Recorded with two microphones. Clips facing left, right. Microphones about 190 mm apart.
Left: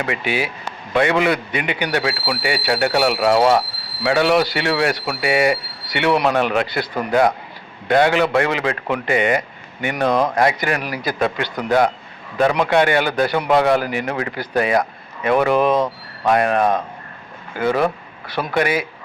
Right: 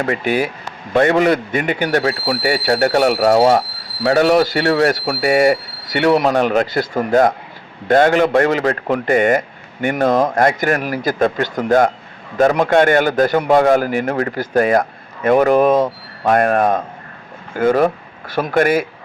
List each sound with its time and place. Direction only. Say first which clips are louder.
0.0 s a man's voice: right 5 dB; 45° right (ahead or behind)